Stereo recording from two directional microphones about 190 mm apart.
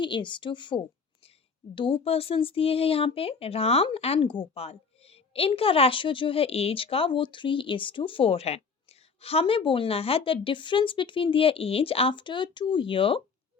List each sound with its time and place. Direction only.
0.0 s speech: 25° left (ahead or behind)